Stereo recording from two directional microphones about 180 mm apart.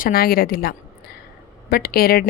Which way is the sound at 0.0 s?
55° left (ahead or behind).